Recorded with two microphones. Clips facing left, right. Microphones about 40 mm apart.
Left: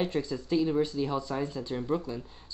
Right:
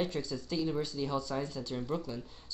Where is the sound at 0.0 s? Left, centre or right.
Left.